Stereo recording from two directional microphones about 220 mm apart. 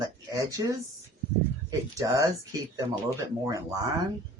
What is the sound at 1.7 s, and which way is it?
Speech, 20° right (ahead or behind).